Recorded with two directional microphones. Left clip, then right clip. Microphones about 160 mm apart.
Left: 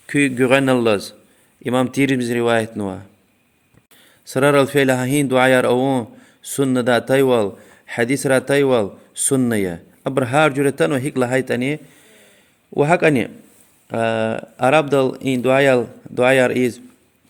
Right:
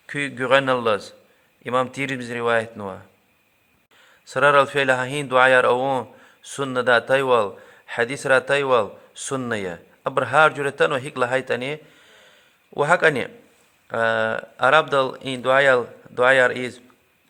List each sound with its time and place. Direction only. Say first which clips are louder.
0.1 s a man's voice: left 4 dB; 35° left (ahead or behind)
4.3 s a man's voice: left 1 dB; 35° left (ahead or behind)